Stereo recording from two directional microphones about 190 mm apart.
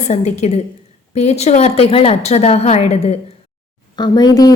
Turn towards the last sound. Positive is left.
turn(degrees=20)  # may be behind; listen again after turning